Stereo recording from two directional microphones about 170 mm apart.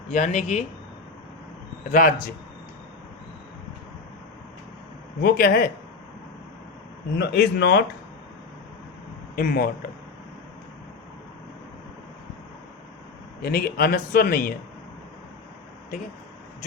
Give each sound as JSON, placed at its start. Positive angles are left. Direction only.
{"t": 0.1, "sound": "speech", "side_deg": 45}
{"t": 1.9, "sound": "speech", "side_deg": 55}
{"t": 5.2, "sound": "a man's voice", "side_deg": 60}
{"t": 7.2, "sound": "speech", "side_deg": 85}
{"t": 9.3, "sound": "speech", "side_deg": 60}
{"t": 13.4, "sound": "a man's voice", "side_deg": 60}